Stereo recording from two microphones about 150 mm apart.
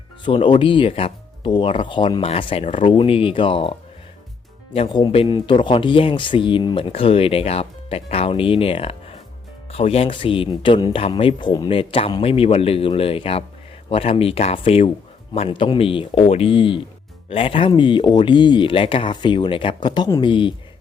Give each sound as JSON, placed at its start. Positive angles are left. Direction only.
{"t": 0.3, "sound": "speech", "side_deg": 35}
{"t": 4.9, "sound": "speech", "side_deg": 30}